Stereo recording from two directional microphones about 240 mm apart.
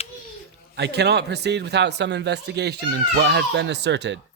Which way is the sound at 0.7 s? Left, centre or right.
Right.